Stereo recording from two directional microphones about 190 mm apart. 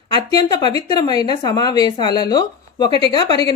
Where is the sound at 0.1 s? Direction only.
20° left (ahead or behind).